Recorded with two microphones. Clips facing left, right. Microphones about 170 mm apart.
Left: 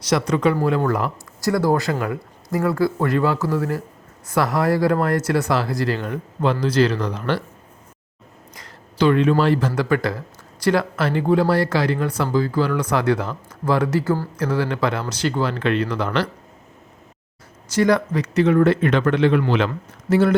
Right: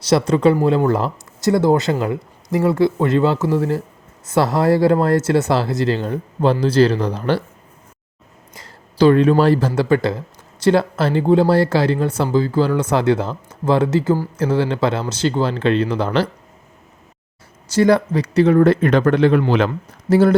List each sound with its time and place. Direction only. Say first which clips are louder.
0.0 s speech: right 4 dB; 30° right (ahead or behind)
8.5 s a sound: right 4 dB; 30° right (ahead or behind)
9.4 s speech: right 4 dB; 35° right (ahead or behind)
17.7 s speech: right 3 dB; 30° right (ahead or behind)